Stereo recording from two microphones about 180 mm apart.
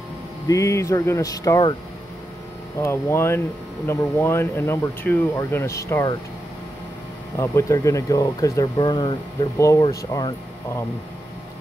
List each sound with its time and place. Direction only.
0.5 s speech: 15° left (ahead or behind)
2.8 s speech: 15° left (ahead or behind)
7.3 s speech: 15° left (ahead or behind)